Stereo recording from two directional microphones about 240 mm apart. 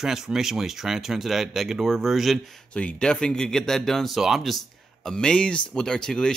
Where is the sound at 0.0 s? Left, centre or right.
Centre.